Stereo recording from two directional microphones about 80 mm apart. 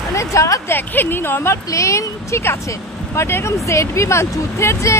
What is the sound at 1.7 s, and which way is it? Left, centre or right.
Speech, left.